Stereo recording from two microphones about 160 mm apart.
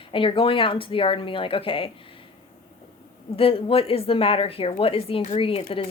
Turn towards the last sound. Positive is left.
turn(degrees=35)  # may be behind; listen again after turning